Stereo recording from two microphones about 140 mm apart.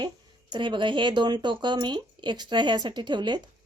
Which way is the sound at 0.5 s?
35° right (ahead or behind).